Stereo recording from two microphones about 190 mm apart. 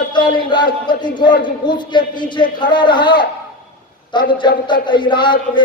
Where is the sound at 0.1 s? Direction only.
25° left (ahead or behind).